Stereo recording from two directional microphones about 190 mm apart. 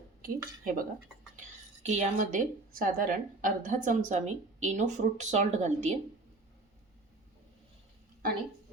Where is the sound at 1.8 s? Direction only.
40° right (ahead or behind).